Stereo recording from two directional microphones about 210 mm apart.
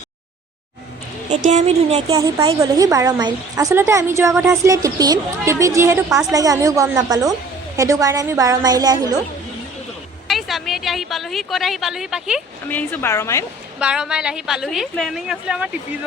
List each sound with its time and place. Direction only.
1.5 s a woman's voice: 30° right (ahead or behind)
10.2 s speech: centre (ahead or behind)
12.6 s a woman's voice: 10° left (ahead or behind)
13.7 s speech: 5° right (ahead or behind)